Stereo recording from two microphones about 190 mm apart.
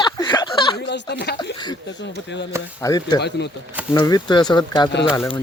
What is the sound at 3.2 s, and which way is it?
Speech, 60° left (ahead or behind).